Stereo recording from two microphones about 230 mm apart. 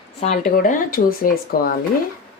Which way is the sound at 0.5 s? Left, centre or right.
Left.